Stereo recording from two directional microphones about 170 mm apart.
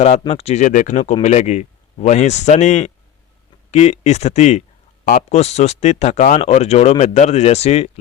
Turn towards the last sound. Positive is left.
turn(degrees=40)  # may be behind; listen again after turning